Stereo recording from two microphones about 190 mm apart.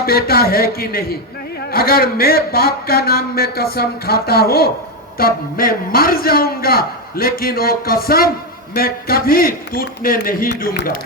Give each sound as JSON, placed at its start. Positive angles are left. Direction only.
{"t": 0.0, "sound": "a man's voice", "side_deg": 55}